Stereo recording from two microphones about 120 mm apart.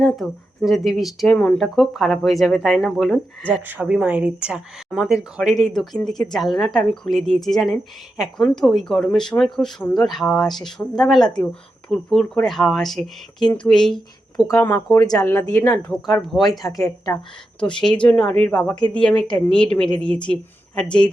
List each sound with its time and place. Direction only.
0.0 s speech: centre (ahead or behind)
3.5 s speech: 10° right (ahead or behind); by 14.9 s 15° left (ahead or behind)
14.9 s speech: 30° left (ahead or behind)
15.9 s speech: centre (ahead or behind)
16.6 s speech: 30° left (ahead or behind)
17.6 s speech: 10° left (ahead or behind)